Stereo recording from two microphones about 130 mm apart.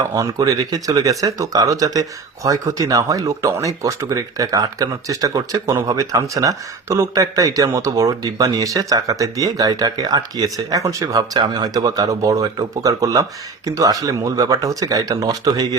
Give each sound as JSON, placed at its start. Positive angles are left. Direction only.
{"t": 0.0, "sound": "speech", "side_deg": -30}